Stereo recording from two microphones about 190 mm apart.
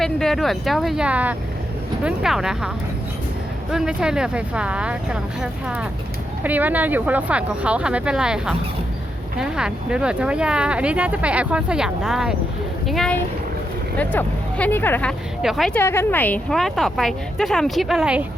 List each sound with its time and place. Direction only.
0.0 s speech: centre (ahead or behind)
3.7 s speech: 5° right (ahead or behind)
15.4 s speech: centre (ahead or behind)
15.8 s speech: 10° left (ahead or behind); by 18.3 s 5° right (ahead or behind)